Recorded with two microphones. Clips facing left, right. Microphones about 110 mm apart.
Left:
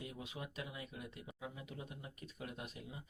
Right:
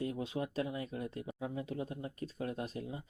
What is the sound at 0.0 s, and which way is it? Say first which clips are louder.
Speech: right 11 dB; 35° right (ahead or behind).